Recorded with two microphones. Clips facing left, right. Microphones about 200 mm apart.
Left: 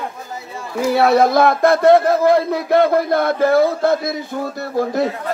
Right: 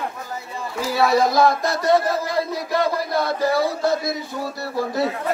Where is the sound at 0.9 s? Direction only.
60° left (ahead or behind).